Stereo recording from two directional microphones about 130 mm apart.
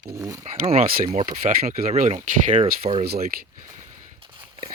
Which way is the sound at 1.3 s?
90° right.